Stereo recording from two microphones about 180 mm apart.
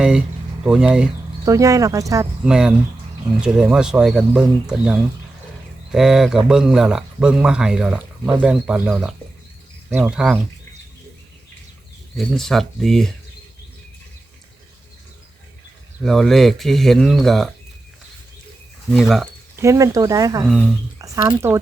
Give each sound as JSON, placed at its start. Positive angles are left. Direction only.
{"t": 0.0, "sound": "speech", "side_deg": -5}
{"t": 1.5, "sound": "speech", "side_deg": -20}
{"t": 2.4, "sound": "a man's voice", "side_deg": -5}
{"t": 12.1, "sound": "a man's voice", "side_deg": 0}
{"t": 16.0, "sound": "a man's voice", "side_deg": 0}
{"t": 18.9, "sound": "a man's voice", "side_deg": 0}
{"t": 19.5, "sound": "speech", "side_deg": -15}